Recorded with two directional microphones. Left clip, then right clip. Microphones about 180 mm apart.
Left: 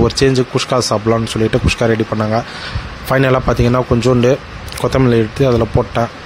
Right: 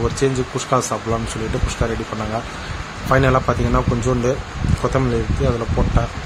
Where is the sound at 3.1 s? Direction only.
45° left (ahead or behind).